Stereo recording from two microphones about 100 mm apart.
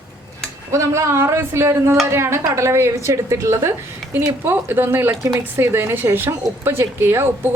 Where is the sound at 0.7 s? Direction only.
30° right (ahead or behind).